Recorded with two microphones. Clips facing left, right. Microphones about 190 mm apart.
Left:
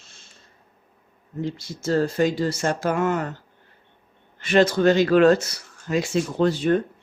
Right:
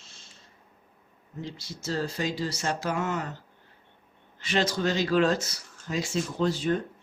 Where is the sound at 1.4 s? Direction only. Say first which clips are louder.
Left 9 dB; 55° left (ahead or behind).